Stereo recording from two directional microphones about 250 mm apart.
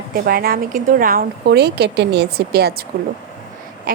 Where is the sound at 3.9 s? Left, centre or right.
Right.